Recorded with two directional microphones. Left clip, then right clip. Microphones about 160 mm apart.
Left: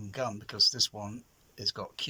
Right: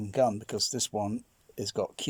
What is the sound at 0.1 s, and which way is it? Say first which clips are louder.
Speech: right 9 dB; 40° right (ahead or behind).